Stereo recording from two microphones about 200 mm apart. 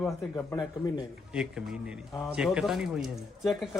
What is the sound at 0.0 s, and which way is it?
Speech, 10° left (ahead or behind).